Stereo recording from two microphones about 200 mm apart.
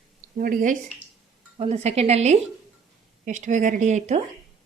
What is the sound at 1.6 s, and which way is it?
A woman's voice, 30° right (ahead or behind).